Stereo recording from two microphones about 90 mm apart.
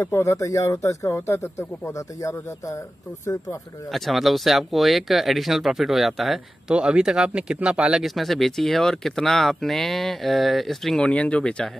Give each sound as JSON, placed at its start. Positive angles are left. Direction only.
{"t": 0.0, "sound": "speech", "side_deg": 35}
{"t": 3.9, "sound": "speech", "side_deg": 0}